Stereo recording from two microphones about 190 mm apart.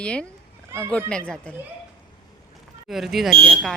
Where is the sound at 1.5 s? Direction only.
5° left (ahead or behind).